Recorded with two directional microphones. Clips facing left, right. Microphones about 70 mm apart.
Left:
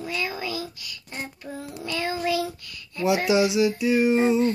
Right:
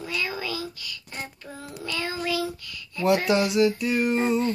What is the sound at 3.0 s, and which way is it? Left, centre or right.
Speech, centre.